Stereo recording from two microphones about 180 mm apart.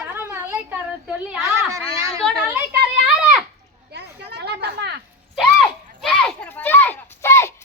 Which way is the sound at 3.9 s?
65° right (ahead or behind).